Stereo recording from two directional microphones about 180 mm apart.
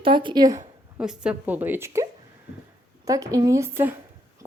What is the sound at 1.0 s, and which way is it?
Speech, 5° right (ahead or behind).